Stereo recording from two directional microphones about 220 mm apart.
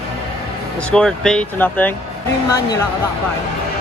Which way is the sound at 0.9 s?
5° left (ahead or behind).